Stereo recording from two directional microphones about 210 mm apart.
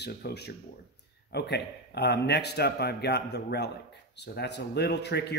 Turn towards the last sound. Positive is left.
turn(degrees=55)  # may be behind; listen again after turning